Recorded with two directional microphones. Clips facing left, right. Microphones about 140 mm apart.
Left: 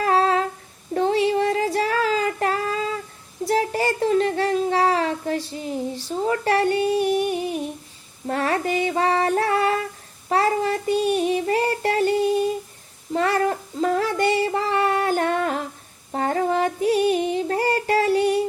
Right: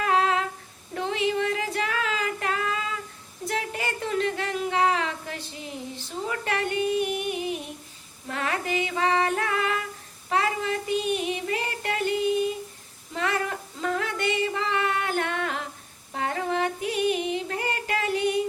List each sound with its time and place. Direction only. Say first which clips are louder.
0.0 s humming: left 4 dB; 35° left (ahead or behind)
0.9 s female singing: left 7 dB; 35° left (ahead or behind)
3.4 s a sound: left 9 dB; 35° left (ahead or behind)
10.2 s child singing: left 6 dB; 40° left (ahead or behind)
13.1 s female singing: left 7 dB; 40° left (ahead or behind)